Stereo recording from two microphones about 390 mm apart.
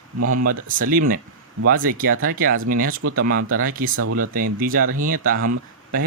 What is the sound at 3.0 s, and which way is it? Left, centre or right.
Speech, right.